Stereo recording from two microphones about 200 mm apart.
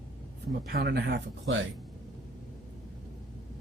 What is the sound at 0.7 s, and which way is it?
Speech, 50° right (ahead or behind).